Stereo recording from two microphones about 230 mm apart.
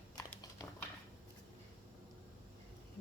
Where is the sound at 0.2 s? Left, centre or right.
Centre.